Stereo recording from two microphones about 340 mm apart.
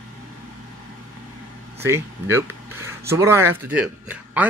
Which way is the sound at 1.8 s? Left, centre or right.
Centre.